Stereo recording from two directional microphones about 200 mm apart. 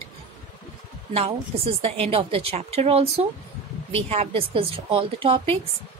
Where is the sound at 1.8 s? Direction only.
30° right (ahead or behind).